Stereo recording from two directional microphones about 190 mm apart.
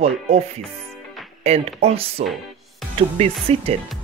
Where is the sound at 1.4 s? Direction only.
30° right (ahead or behind).